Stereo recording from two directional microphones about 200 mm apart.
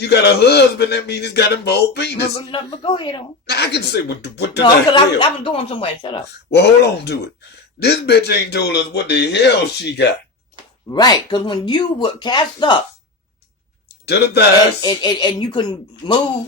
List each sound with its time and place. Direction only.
0.0 s a man's voice: 55° left (ahead or behind)
2.3 s speech: 25° left (ahead or behind)
3.4 s a man's voice: 55° left (ahead or behind)
4.6 s speech: 25° left (ahead or behind)
6.5 s a man's voice: 55° left (ahead or behind)
10.9 s speech: 20° left (ahead or behind)
13.8 s a sound: 55° left (ahead or behind)
14.8 s speech: 20° left (ahead or behind)